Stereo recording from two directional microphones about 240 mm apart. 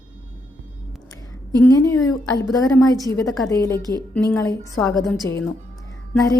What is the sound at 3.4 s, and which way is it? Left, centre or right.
A woman's voice, centre.